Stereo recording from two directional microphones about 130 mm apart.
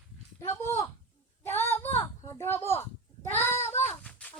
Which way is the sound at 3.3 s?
20° left (ahead or behind).